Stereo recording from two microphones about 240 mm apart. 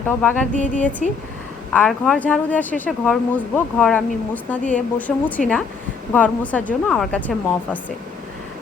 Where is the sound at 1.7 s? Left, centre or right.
Centre.